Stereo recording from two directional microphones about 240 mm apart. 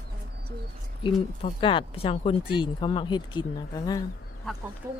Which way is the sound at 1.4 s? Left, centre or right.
Left.